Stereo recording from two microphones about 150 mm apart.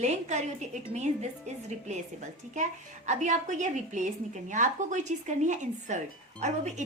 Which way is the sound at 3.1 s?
55° right (ahead or behind).